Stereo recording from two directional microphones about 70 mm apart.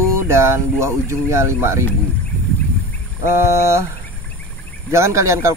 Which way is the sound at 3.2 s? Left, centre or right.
Right.